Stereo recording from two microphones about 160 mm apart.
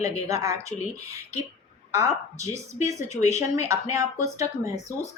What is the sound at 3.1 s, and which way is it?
Speech, 45° left (ahead or behind).